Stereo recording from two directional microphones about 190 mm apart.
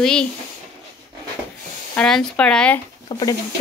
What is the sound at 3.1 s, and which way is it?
Speech, 20° left (ahead or behind).